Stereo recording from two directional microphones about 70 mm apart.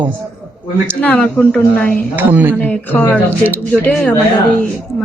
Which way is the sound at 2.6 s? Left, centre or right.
Left.